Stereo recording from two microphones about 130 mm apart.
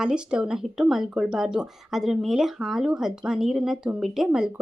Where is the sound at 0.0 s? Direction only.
5° right (ahead or behind).